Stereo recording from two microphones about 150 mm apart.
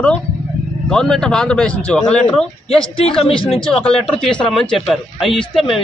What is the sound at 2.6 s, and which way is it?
Speech, 35° left (ahead or behind).